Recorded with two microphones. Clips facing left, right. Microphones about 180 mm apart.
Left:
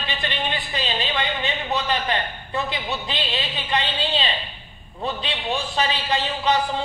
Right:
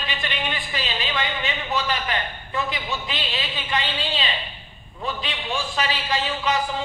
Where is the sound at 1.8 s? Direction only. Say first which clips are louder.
Left 2 dB; 30° left (ahead or behind).